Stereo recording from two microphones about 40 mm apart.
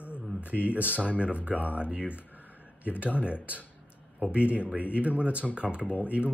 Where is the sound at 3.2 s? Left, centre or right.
Right.